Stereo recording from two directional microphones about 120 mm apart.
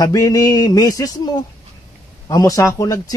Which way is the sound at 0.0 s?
30° left (ahead or behind).